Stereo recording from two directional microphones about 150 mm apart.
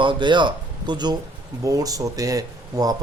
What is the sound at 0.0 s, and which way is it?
A man's voice, 35° right (ahead or behind).